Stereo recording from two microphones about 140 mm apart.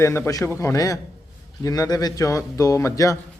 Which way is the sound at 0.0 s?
20° left (ahead or behind).